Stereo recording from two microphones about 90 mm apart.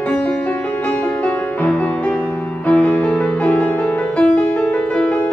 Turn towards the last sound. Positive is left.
turn(degrees=15)  # may be behind; listen again after turning